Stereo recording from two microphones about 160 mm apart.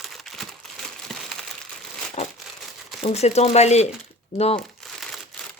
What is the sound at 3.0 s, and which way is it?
Speech, 40° left (ahead or behind).